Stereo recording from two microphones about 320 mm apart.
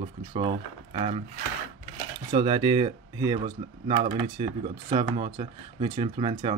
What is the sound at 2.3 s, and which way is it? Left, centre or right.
Speech, centre.